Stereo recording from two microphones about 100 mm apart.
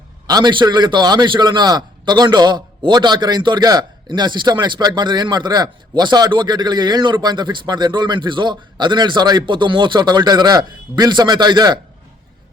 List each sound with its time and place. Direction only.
0.3 s a man's voice: 45° right (ahead or behind)